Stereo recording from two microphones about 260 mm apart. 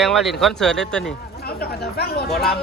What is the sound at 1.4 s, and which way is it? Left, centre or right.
Speech, left.